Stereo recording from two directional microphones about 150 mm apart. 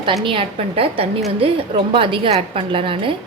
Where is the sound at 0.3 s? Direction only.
35° right (ahead or behind).